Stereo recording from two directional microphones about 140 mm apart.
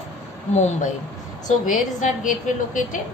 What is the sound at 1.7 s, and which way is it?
A woman's voice, 70° left (ahead or behind).